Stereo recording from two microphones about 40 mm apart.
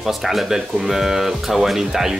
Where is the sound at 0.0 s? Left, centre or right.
Centre.